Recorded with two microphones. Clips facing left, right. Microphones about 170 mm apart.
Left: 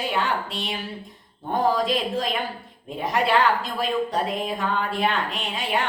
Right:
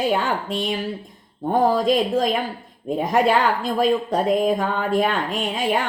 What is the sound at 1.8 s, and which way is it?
Speech, 45° right (ahead or behind).